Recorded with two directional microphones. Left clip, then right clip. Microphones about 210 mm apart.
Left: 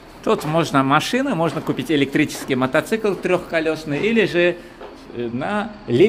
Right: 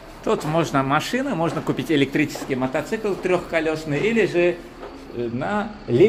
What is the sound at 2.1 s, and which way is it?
Speech, 30° left (ahead or behind).